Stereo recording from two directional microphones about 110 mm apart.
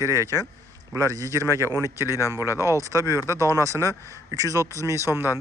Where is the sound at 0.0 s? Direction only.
30° right (ahead or behind).